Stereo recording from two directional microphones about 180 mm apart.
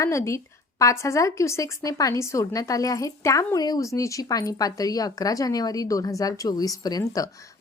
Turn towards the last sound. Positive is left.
turn(degrees=20)  # may be behind; listen again after turning